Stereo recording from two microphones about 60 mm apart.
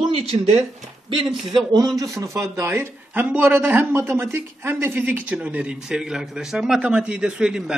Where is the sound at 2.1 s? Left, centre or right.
Right.